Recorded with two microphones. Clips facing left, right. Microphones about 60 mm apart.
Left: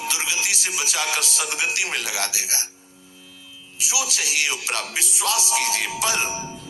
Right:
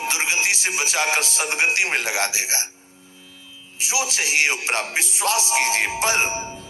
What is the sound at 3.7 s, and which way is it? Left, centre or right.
Speech, right.